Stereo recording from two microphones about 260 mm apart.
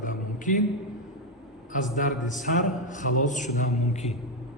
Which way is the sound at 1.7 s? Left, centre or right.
Left.